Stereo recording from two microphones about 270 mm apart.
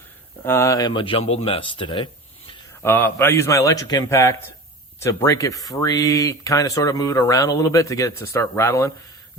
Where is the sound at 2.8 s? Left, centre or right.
Centre.